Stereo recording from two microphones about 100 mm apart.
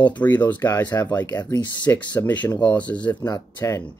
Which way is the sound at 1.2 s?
40° left (ahead or behind).